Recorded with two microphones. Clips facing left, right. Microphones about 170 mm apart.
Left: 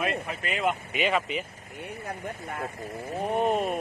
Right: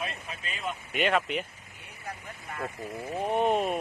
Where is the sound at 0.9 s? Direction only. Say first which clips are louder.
Even; centre (ahead or behind).